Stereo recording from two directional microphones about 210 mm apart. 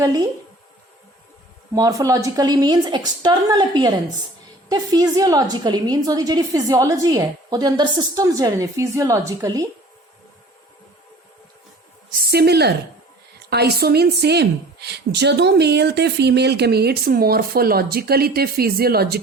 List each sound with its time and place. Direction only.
0.0 s a woman's voice: 15° right (ahead or behind)
1.7 s a woman's voice: 15° right (ahead or behind)
12.2 s a woman's voice: 50° right (ahead or behind)